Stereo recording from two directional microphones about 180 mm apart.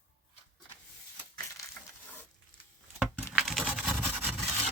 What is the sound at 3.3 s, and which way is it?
Patter, centre (ahead or behind).